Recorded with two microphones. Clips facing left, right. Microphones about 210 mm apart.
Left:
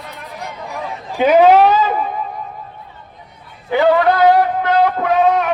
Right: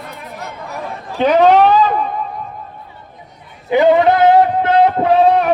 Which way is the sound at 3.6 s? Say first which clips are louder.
Right 2 dB; 20° right (ahead or behind).